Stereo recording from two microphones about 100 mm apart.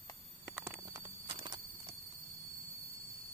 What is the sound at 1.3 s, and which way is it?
Horse, 55° right (ahead or behind).